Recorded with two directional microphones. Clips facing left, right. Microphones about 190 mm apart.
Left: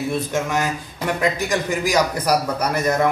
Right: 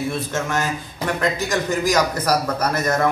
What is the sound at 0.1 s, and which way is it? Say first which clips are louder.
A man's voice: left 2 dB; 15° left (ahead or behind).